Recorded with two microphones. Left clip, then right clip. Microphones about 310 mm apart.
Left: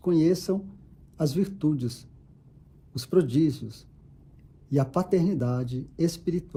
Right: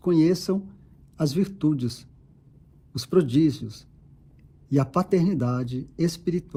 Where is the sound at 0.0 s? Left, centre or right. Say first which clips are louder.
Right 2 dB; right.